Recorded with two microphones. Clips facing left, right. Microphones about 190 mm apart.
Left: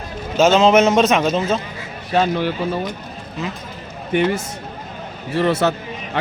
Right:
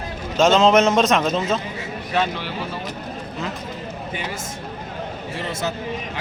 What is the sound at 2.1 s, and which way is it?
Speech, 40° left (ahead or behind).